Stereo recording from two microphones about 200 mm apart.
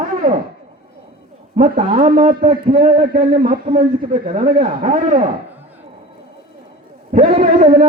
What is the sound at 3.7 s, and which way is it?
Speech, 25° right (ahead or behind).